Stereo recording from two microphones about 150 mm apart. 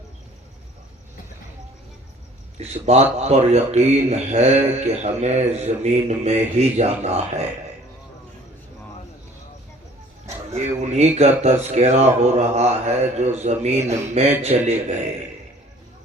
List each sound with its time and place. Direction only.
2.6 s speech: 45° right (ahead or behind)
10.2 s speech: 50° right (ahead or behind)